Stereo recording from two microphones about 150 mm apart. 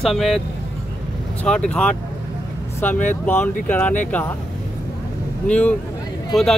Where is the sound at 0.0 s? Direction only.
Centre (ahead or behind).